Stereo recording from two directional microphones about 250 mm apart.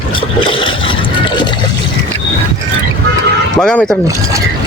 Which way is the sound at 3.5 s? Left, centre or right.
Centre.